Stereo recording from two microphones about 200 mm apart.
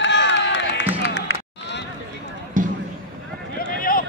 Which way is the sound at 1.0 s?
60° left (ahead or behind).